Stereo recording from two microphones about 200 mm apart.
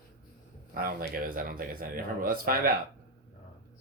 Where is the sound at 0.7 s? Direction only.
45° right (ahead or behind).